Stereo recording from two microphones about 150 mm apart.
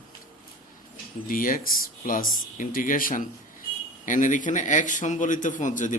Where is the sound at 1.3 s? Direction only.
70° left (ahead or behind).